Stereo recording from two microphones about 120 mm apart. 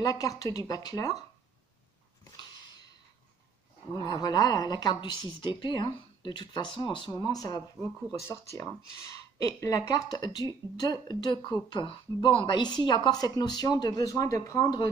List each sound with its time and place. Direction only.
0.0 s speech: 30° left (ahead or behind)
2.3 s a sound: 35° left (ahead or behind)
3.9 s speech: 35° left (ahead or behind)